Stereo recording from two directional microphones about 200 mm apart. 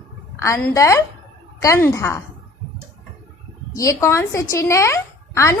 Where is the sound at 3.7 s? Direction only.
15° left (ahead or behind).